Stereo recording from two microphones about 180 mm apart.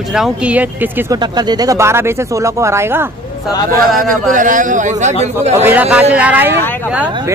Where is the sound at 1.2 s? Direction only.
25° right (ahead or behind).